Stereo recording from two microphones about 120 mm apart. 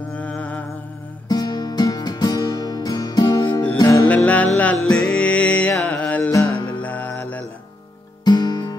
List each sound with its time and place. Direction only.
0.1 s music: 10° left (ahead or behind)
1.3 s music: 35° left (ahead or behind)
4.1 s music: 10° left (ahead or behind)
8.2 s guitar: 35° left (ahead or behind)